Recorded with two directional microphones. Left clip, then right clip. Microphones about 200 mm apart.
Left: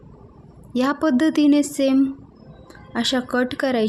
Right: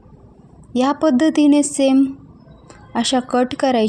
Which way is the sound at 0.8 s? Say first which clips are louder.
Right 4 dB; 10° right (ahead or behind).